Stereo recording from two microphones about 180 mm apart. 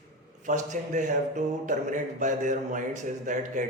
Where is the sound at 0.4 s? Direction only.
45° right (ahead or behind).